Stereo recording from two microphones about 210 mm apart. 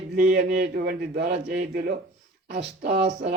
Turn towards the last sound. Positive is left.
turn(degrees=-50)  # may be behind; listen again after turning